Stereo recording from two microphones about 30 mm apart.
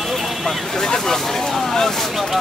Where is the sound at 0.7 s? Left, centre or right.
Centre.